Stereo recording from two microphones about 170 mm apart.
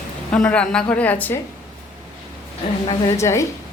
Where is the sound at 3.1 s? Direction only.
15° left (ahead or behind).